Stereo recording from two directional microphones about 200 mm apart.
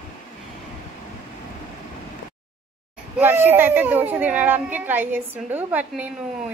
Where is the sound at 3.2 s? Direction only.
10° right (ahead or behind).